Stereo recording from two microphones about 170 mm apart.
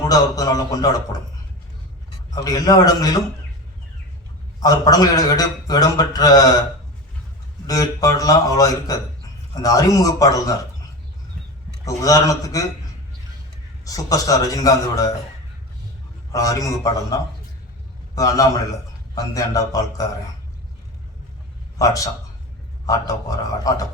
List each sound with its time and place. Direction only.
0.1 s a man's voice: 20° left (ahead or behind)
2.3 s a man's voice: 20° left (ahead or behind)
4.6 s a man's voice: 20° left (ahead or behind)
7.7 s a man's voice: 20° left (ahead or behind)
11.9 s a man's voice: 20° left (ahead or behind)
13.8 s a man's voice: 20° left (ahead or behind)
16.3 s a man's voice: 20° left (ahead or behind)
21.8 s a man's voice: 20° left (ahead or behind)
23.6 s a man's voice: 20° left (ahead or behind)